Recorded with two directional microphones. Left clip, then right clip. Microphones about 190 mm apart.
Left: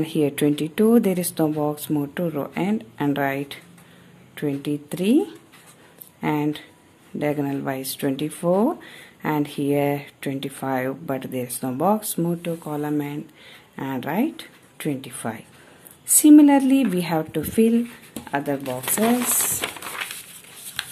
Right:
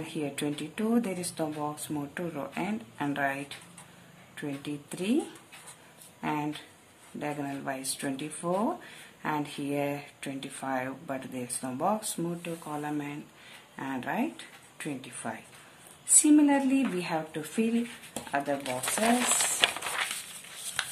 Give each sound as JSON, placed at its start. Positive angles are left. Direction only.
{"t": 0.0, "sound": "speech", "side_deg": 45}
{"t": 4.4, "sound": "speech", "side_deg": 40}
{"t": 6.2, "sound": "speech", "side_deg": 40}
{"t": 19.4, "sound": "a sound", "side_deg": 0}